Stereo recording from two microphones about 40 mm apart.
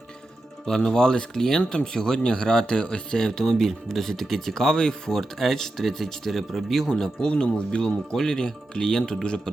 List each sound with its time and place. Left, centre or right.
0.9 s speech: centre
7.3 s speech: left